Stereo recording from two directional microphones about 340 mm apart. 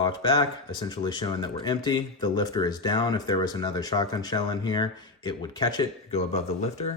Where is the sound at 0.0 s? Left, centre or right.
Centre.